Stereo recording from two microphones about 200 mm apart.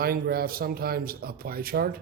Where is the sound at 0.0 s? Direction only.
50° right (ahead or behind).